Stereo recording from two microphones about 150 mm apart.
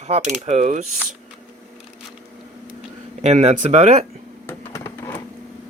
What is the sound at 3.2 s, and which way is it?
Speech, 50° right (ahead or behind).